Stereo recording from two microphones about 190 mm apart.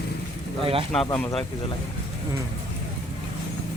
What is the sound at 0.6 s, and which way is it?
Speech, 30° right (ahead or behind).